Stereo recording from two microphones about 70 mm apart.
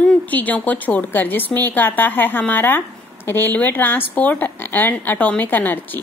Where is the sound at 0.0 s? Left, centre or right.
Left.